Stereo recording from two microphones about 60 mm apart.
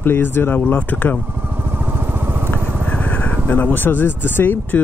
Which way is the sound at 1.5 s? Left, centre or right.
Right.